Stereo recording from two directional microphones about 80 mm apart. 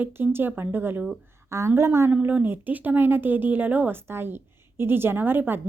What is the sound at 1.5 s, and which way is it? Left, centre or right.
Speech, right.